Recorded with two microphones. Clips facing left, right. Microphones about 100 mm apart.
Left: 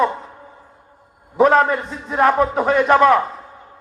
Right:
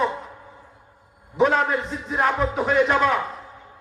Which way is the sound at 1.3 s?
55° left (ahead or behind).